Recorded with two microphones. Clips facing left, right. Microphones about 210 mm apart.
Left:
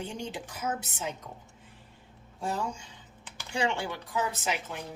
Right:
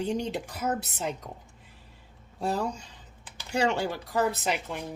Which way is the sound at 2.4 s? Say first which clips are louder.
Right 4 dB; 40° right (ahead or behind).